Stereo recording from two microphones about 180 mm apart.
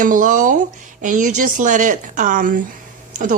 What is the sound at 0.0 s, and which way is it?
Speech, 45° right (ahead or behind).